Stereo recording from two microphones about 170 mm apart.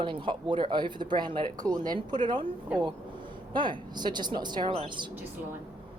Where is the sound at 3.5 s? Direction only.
30° right (ahead or behind).